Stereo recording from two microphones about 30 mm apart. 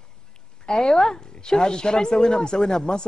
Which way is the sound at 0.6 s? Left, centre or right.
Left.